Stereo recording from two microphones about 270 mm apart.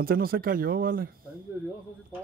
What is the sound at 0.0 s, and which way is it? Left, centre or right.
Speech, right.